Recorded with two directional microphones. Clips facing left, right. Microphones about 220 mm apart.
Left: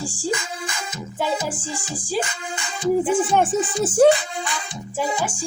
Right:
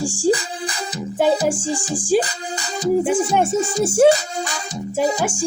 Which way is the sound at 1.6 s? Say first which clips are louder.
Right 7 dB; 30° right (ahead or behind).